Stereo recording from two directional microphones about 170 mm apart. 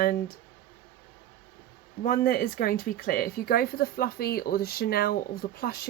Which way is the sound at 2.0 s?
60° left (ahead or behind).